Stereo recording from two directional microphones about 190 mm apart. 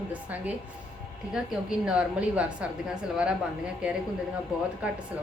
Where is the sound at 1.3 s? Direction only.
5° right (ahead or behind).